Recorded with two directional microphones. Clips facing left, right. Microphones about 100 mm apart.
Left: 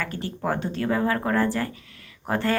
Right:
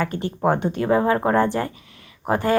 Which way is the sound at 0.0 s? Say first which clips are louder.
Right 7 dB; 20° right (ahead or behind).